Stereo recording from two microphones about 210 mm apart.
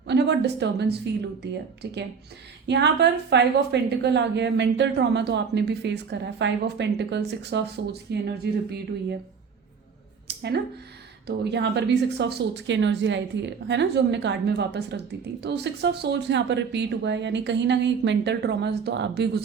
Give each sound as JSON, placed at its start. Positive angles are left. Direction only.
{"t": 0.1, "sound": "a woman's voice", "side_deg": -55}
{"t": 10.2, "sound": "a sound", "side_deg": -50}
{"t": 11.3, "sound": "a woman's voice", "side_deg": -55}